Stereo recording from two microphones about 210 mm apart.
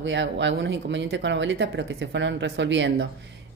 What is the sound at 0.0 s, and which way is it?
Speech, 60° right (ahead or behind).